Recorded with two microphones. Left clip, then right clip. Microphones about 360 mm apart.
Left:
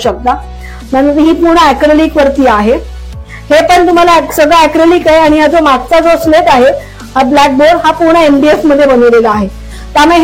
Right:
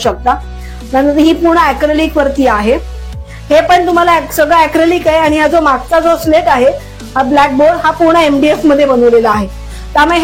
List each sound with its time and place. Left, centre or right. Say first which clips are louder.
0.0 s a woman's voice: left 1 dB; right